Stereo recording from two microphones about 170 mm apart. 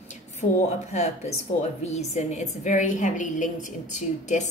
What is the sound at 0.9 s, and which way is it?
A woman's voice, 40° left (ahead or behind).